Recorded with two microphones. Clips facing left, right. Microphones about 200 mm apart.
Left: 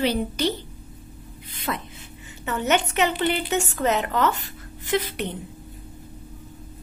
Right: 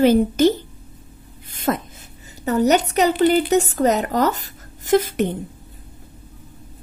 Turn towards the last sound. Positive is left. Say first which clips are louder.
# right 8 dB
turn(degrees=-45)  # may be behind; listen again after turning